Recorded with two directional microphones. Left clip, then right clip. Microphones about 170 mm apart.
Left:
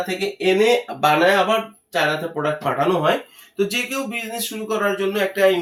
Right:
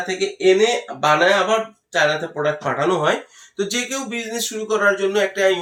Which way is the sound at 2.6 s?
25° right (ahead or behind).